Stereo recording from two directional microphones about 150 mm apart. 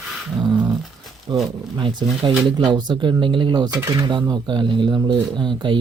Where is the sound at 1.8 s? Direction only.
30° right (ahead or behind).